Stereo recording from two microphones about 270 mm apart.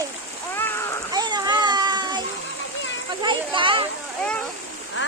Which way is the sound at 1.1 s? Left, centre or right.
Centre.